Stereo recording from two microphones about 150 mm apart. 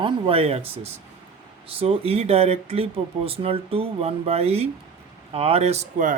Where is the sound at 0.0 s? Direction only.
40° right (ahead or behind).